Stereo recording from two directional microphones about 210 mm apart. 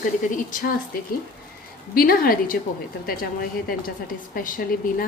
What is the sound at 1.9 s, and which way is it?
Speech, 45° left (ahead or behind).